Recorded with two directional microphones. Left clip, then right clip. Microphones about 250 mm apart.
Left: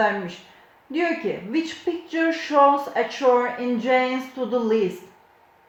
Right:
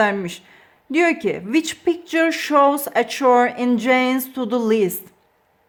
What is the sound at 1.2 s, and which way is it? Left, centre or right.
Speech, right.